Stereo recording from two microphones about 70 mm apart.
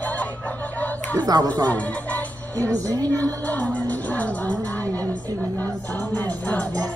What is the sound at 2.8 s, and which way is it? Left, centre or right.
Speech, right.